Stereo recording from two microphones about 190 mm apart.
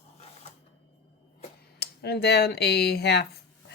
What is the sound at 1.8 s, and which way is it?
Speech, 60° left (ahead or behind).